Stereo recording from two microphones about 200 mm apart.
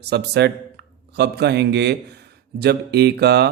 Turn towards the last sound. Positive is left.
turn(degrees=-55)  # may be behind; listen again after turning